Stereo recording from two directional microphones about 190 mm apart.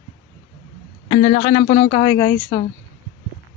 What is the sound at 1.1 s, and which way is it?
A man's voice, 35° left (ahead or behind).